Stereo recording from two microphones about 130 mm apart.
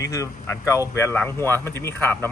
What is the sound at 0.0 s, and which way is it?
Speech, 25° left (ahead or behind).